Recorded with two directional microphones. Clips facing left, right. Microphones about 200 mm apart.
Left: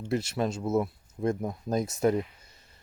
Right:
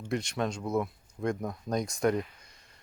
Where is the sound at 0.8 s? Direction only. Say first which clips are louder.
Left 3 dB; 25° left (ahead or behind).